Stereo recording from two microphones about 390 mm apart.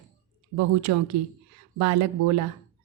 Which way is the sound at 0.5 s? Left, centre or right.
Right.